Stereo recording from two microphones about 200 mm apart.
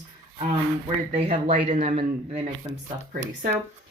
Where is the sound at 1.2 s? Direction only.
30° right (ahead or behind).